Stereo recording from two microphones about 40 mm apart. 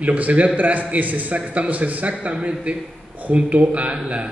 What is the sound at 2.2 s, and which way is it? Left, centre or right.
A man's voice, right.